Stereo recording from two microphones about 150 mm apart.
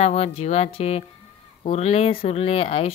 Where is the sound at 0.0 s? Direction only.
45° left (ahead or behind).